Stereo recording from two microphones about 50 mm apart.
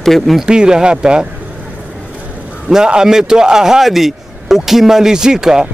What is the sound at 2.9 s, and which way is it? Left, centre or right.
Speech, centre.